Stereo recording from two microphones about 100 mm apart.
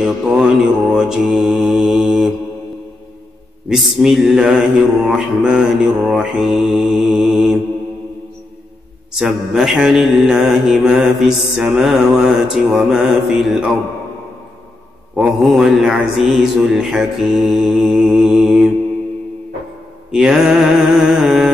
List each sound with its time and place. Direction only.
0.0 s mantra: 5° right (ahead or behind)
3.6 s mantra: 5° right (ahead or behind)
9.1 s mantra: 5° right (ahead or behind)
15.1 s mantra: 10° right (ahead or behind)
20.1 s mantra: 5° right (ahead or behind)